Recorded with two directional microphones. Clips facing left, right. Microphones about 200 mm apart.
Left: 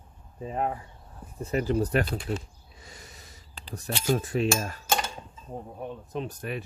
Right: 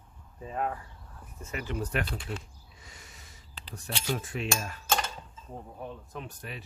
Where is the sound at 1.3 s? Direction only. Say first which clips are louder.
Left 9 dB; 35° left (ahead or behind).